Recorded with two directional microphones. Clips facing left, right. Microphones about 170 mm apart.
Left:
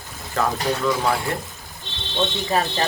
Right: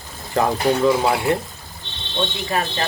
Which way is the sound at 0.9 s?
20° right (ahead or behind).